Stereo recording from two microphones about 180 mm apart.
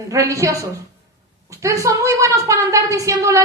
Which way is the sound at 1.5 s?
15° right (ahead or behind).